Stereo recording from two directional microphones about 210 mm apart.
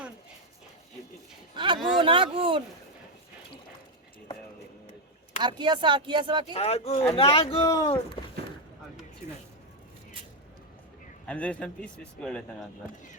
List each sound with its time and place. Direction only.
1.5 s a sound: 20° right (ahead or behind)
2.0 s speech: 25° right (ahead or behind)
5.4 s speech: 20° right (ahead or behind)
6.5 s speech: 30° left (ahead or behind)
11.3 s speech: 5° left (ahead or behind)